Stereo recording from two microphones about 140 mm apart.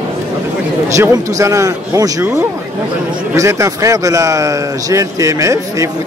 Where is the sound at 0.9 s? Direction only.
20° right (ahead or behind).